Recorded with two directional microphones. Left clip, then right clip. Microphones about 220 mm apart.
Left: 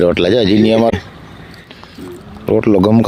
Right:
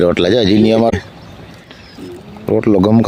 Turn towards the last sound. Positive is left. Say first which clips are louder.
# left 1 dB
turn(degrees=0)  # may be behind; listen again after turning